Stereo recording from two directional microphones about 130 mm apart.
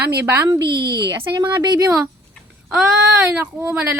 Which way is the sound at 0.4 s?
30° right (ahead or behind).